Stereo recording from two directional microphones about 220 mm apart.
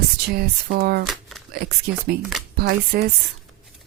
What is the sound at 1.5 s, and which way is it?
Speech, 45° right (ahead or behind).